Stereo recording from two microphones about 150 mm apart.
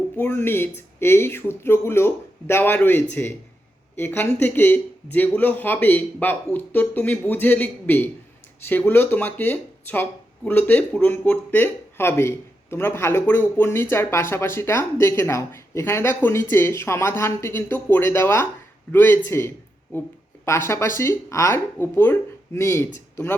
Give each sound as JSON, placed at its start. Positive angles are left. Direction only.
{"t": 0.2, "sound": "a man's voice", "side_deg": 15}